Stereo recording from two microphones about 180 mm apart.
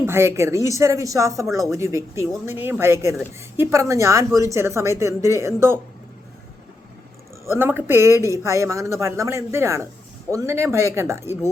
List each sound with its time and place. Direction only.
0.0 s speech: 15° right (ahead or behind)
7.5 s speech: 10° right (ahead or behind)